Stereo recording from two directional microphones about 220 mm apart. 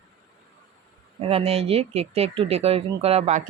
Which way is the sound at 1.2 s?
25° right (ahead or behind).